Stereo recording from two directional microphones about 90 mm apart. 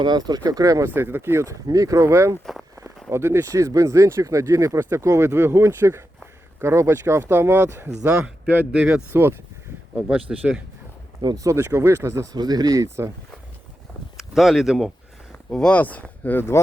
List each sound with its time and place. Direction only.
0.0 s speech: 50° right (ahead or behind)
0.9 s speech: 25° right (ahead or behind)
10.1 s speech: 10° right (ahead or behind)
11.3 s speech: 35° right (ahead or behind)
14.2 s speech: centre (ahead or behind)
15.7 s speech: 15° left (ahead or behind)